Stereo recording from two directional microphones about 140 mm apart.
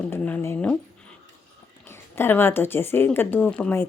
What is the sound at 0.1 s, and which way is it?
Speech, 15° left (ahead or behind).